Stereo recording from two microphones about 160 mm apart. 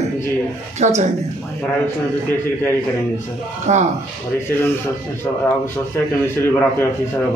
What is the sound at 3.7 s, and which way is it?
Speech, 45° right (ahead or behind).